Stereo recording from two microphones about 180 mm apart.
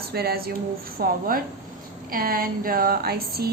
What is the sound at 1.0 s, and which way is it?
Speech, 55° right (ahead or behind).